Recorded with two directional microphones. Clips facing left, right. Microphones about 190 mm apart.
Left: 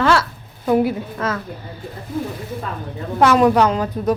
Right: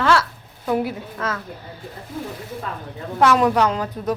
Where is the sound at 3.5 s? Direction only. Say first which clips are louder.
Left 3 dB; 30° left (ahead or behind).